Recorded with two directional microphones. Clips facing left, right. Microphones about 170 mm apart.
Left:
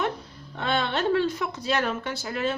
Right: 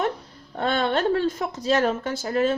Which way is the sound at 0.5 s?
45° right (ahead or behind).